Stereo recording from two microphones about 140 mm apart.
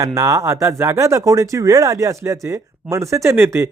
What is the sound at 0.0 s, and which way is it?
Speech, 20° right (ahead or behind).